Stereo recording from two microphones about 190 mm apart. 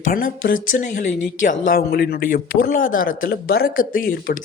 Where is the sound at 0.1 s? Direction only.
50° left (ahead or behind).